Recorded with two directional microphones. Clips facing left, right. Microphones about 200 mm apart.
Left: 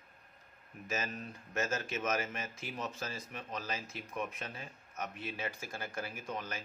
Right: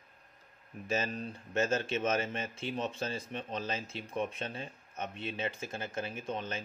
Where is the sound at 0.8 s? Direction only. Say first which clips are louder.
Right 5 dB; 30° right (ahead or behind).